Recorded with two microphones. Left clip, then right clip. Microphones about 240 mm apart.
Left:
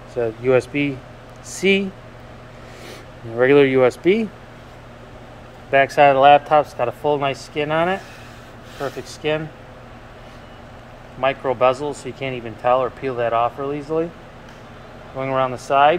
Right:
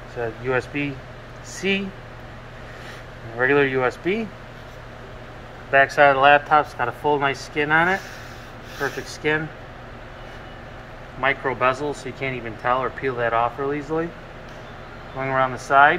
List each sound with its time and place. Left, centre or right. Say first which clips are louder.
0.2 s speech: left 6 dB; left
3.3 s speech: left 5 dB; left
5.7 s speech: left 2 dB; left
11.1 s speech: left 3 dB; left
15.1 s speech: left 1 dB; left